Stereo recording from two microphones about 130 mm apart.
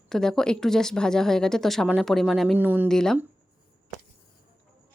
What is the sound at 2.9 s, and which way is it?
Speech, 5° left (ahead or behind).